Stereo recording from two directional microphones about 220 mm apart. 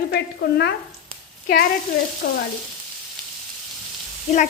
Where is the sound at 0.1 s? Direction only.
50° left (ahead or behind).